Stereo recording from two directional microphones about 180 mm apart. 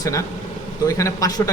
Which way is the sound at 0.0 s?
15° left (ahead or behind).